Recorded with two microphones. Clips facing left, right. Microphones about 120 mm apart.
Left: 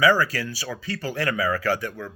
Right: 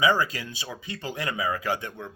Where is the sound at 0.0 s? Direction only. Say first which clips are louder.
Left 4 dB; 20° right (ahead or behind).